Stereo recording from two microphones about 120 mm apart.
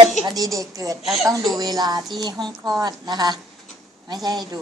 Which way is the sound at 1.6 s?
35° right (ahead or behind).